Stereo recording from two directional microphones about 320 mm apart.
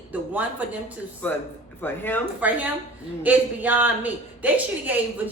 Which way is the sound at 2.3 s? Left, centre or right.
Centre.